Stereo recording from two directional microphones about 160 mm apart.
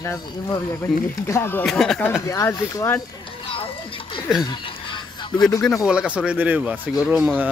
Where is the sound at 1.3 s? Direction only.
15° left (ahead or behind).